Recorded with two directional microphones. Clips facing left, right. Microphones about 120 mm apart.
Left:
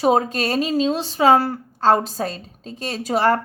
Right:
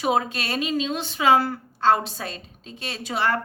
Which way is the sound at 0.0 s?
40° left (ahead or behind).